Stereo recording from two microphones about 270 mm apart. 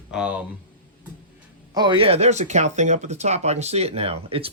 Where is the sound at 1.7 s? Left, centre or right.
Centre.